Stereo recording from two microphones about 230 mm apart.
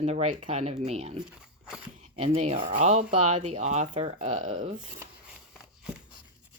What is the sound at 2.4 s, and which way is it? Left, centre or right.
A woman's voice, right.